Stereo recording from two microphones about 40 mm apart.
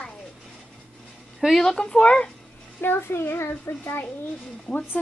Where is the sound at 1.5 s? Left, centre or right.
Centre.